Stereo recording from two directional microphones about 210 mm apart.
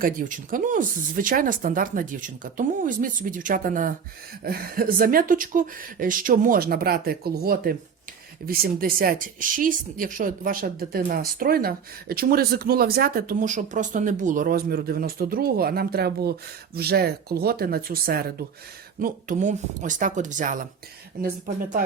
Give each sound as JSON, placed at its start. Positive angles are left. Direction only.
{"t": 0.0, "sound": "speech", "side_deg": -40}